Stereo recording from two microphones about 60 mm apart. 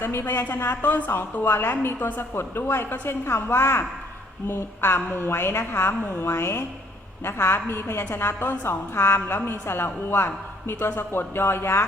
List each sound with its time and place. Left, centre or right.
0.0 s a woman's voice: left
0.4 s a woman's voice: left